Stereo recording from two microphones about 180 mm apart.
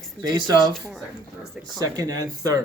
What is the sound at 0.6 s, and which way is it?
Speech, centre (ahead or behind).